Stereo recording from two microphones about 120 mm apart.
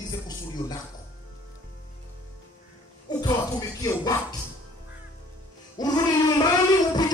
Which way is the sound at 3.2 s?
30° left (ahead or behind).